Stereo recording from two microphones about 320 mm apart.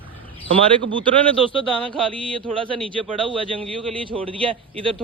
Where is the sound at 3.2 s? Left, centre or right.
Centre.